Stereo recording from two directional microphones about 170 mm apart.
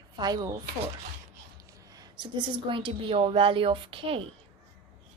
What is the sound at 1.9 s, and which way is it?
A woman's voice, 25° right (ahead or behind).